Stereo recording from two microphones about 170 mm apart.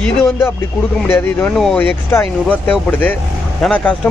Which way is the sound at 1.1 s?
10° left (ahead or behind).